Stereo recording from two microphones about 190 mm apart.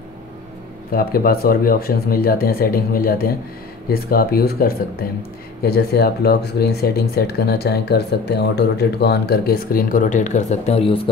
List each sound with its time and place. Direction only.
0.9 s speech: 50° left (ahead or behind); by 11.0 s 30° left (ahead or behind)